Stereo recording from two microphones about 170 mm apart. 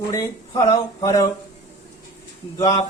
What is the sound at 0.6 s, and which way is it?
Speech, 20° left (ahead or behind).